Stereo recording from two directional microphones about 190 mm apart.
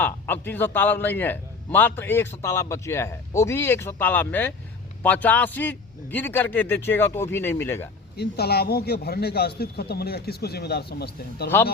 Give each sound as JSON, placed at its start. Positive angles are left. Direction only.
{"t": 0.0, "sound": "a man's voice", "side_deg": 10}
{"t": 8.1, "sound": "speech", "side_deg": 60}
{"t": 11.4, "sound": "a man's voice", "side_deg": 10}